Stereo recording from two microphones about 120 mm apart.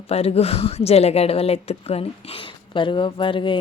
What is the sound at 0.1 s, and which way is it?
Speech, 55° left (ahead or behind).